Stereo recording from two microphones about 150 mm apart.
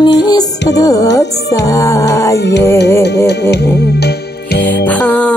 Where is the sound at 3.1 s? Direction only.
90° left.